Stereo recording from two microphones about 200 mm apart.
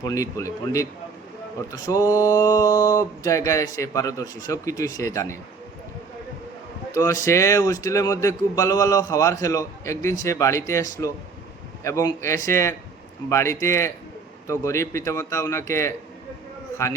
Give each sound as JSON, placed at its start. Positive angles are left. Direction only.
{"t": 0.0, "sound": "a man's voice", "side_deg": 15}
{"t": 6.9, "sound": "a man's voice", "side_deg": 15}